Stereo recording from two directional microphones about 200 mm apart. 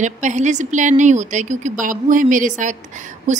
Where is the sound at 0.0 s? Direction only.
35° right (ahead or behind).